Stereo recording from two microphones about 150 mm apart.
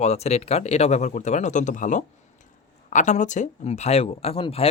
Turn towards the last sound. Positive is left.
turn(degrees=40)  # may be behind; listen again after turning